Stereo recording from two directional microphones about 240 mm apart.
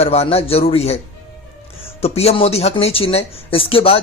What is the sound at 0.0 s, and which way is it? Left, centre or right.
Speech, left.